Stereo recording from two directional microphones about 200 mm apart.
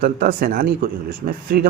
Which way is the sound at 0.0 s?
45° right (ahead or behind).